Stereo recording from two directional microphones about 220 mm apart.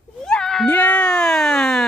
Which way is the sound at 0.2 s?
5° left (ahead or behind).